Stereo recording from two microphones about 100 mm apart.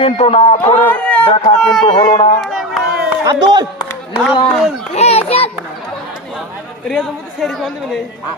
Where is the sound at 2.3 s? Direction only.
5° left (ahead or behind).